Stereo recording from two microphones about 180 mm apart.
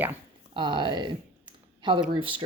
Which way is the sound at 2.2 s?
30° right (ahead or behind).